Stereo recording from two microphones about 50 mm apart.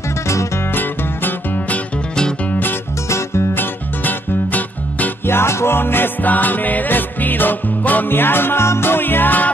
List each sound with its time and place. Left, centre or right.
0.7 s music: left
3.1 s music: left
3.5 s music: left
5.2 s music: left
5.8 s music: left